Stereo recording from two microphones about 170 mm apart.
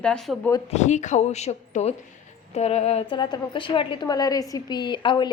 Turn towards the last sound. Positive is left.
turn(degrees=30)  # may be behind; listen again after turning